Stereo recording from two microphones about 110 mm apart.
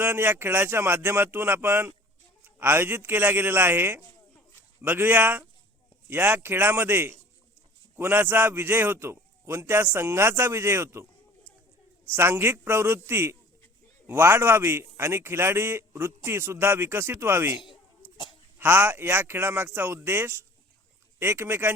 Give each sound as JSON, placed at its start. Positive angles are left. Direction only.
{"t": 0.0, "sound": "a man's voice", "side_deg": -20}
{"t": 12.1, "sound": "a man's voice", "side_deg": -20}
{"t": 18.6, "sound": "a man's voice", "side_deg": -20}